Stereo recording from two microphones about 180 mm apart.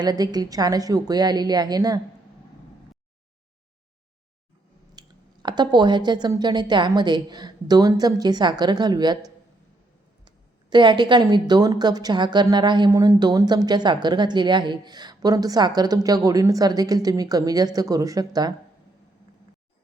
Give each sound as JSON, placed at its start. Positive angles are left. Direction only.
{"t": 0.0, "sound": "speech", "side_deg": -20}
{"t": 4.9, "sound": "speech", "side_deg": -25}